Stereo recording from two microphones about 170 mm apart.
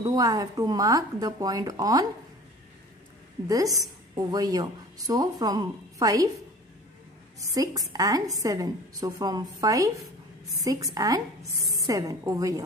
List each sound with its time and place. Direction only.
0.0 s speech: 20° right (ahead or behind)
3.4 s speech: 20° right (ahead or behind)
7.5 s speech: 20° right (ahead or behind)